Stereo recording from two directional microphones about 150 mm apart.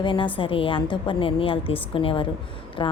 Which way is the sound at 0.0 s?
35° left (ahead or behind).